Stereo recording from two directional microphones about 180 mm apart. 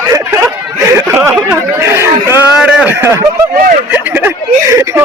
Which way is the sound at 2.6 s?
5° right (ahead or behind).